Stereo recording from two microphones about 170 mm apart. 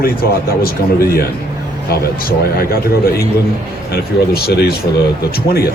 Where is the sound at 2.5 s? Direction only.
60° left (ahead or behind).